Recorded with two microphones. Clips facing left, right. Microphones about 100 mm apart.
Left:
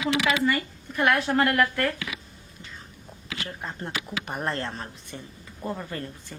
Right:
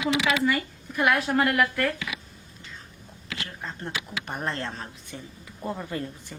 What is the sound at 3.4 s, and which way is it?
Speech, 10° left (ahead or behind).